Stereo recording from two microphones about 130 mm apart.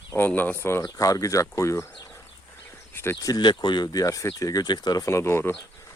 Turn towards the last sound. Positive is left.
turn(degrees=20)  # may be behind; listen again after turning